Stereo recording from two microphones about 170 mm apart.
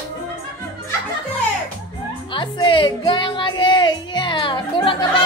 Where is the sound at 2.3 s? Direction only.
30° left (ahead or behind).